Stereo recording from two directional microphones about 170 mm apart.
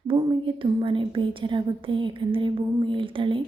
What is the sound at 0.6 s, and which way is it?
A woman's voice, 30° right (ahead or behind).